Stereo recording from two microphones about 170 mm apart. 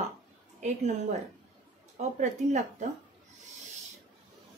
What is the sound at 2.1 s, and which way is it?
Speech, 45° right (ahead or behind).